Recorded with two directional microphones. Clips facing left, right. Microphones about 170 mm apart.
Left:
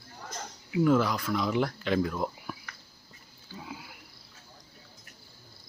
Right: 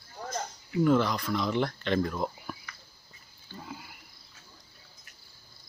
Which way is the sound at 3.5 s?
5° left (ahead or behind).